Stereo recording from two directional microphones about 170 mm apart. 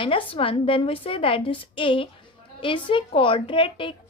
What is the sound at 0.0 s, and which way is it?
A woman's voice, 30° left (ahead or behind).